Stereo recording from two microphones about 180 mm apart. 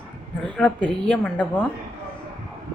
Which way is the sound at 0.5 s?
5° left (ahead or behind).